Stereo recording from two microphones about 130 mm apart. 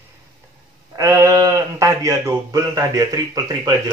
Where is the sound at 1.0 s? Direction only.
25° right (ahead or behind).